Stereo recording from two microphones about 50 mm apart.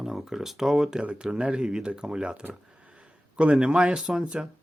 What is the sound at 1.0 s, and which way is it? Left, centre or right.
Speech, centre.